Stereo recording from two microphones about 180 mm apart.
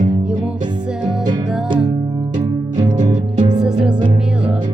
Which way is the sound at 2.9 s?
45° right (ahead or behind).